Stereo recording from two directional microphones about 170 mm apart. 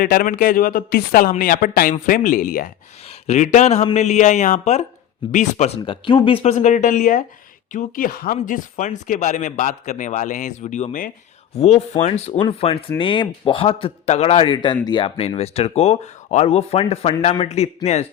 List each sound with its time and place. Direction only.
0.0 s a man's voice: 55° left (ahead or behind); by 17.7 s 35° left (ahead or behind)